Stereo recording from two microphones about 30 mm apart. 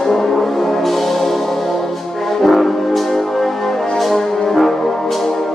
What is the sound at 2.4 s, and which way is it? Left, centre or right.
Music, centre.